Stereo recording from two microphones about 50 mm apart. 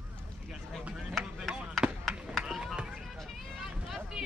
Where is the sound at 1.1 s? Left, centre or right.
Centre.